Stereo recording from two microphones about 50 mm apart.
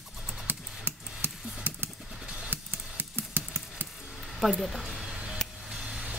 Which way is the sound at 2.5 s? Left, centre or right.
Right.